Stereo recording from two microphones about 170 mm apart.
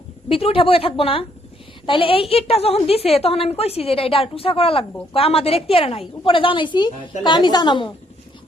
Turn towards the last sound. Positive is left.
turn(degrees=25)  # may be behind; listen again after turning